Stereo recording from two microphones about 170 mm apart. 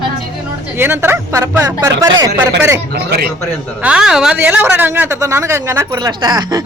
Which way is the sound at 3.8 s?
5° right (ahead or behind).